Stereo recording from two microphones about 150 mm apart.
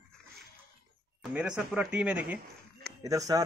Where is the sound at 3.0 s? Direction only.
20° right (ahead or behind).